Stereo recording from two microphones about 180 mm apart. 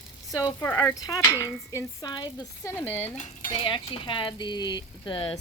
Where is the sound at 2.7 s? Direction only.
10° left (ahead or behind).